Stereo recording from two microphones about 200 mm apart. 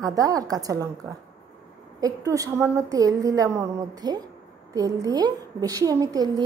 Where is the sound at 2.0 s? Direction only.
15° right (ahead or behind).